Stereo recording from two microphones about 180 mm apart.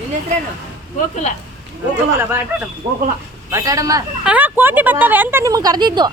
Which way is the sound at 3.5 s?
20° right (ahead or behind).